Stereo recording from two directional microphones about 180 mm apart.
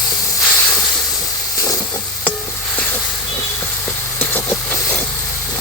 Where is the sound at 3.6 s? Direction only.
10° left (ahead or behind).